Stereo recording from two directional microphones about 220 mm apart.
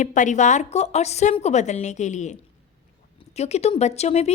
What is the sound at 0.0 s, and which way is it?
A woman's voice, 35° left (ahead or behind).